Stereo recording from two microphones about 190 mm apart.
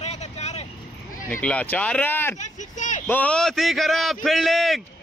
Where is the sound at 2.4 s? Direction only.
40° left (ahead or behind).